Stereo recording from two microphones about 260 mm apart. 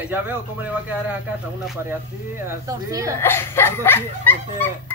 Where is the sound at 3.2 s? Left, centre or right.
Centre.